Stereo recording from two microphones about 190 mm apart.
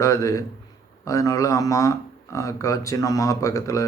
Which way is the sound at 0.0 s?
15° left (ahead or behind).